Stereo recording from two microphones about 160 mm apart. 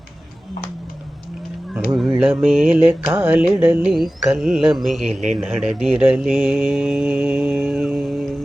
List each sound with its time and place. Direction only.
2.0 s mantra: 5° right (ahead or behind)
3.1 s a sound: 10° right (ahead or behind)
3.5 s mantra: 10° right (ahead or behind)
5.4 s speech: 5° right (ahead or behind)